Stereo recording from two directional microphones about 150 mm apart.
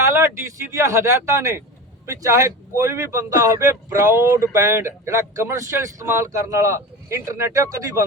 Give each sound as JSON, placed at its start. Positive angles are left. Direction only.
{"t": 0.0, "sound": "speech", "side_deg": -20}